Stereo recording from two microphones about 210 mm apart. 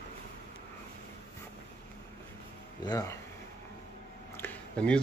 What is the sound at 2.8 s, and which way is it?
Speech, 15° left (ahead or behind).